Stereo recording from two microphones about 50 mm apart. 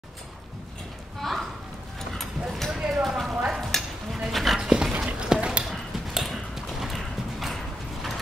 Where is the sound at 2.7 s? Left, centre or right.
Centre.